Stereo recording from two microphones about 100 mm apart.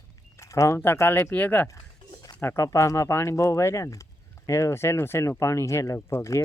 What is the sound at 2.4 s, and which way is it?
Speech, 30° left (ahead or behind).